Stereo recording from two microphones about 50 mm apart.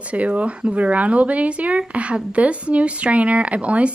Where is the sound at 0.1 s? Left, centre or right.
Right.